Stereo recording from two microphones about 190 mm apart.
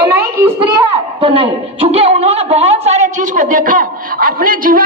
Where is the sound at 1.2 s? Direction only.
30° right (ahead or behind).